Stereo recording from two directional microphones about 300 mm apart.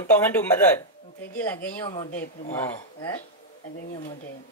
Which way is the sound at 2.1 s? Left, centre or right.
Left.